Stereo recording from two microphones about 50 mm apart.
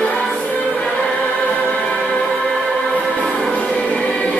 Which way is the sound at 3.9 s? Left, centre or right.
Centre.